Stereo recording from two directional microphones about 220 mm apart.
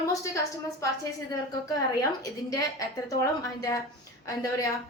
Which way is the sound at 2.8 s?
15° left (ahead or behind).